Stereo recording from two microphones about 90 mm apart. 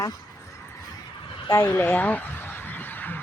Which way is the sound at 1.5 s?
30° left (ahead or behind).